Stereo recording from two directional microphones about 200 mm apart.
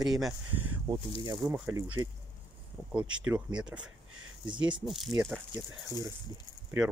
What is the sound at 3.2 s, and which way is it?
Speech, 5° right (ahead or behind).